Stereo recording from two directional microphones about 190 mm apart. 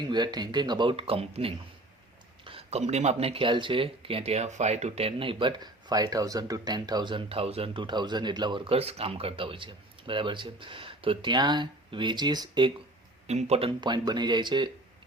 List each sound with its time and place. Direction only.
0.0 s speech: 20° right (ahead or behind)
13.2 s speech: 35° right (ahead or behind)